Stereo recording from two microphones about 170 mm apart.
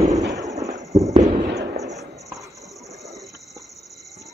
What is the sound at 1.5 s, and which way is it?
Fireworks, 75° right (ahead or behind).